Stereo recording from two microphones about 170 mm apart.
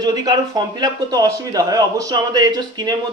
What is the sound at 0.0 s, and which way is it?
A man's voice, 20° right (ahead or behind).